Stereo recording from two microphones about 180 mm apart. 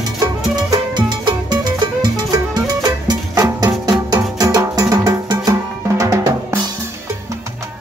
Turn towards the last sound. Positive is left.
turn(degrees=-15)  # may be behind; listen again after turning